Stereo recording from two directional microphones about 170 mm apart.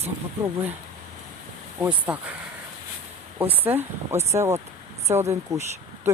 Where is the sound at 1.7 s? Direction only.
10° right (ahead or behind).